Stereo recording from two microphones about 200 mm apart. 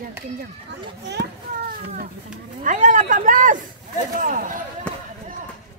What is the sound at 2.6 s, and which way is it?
Speech, 40° right (ahead or behind).